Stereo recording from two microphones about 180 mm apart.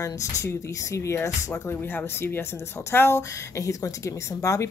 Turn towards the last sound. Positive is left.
turn(degrees=15)  # may be behind; listen again after turning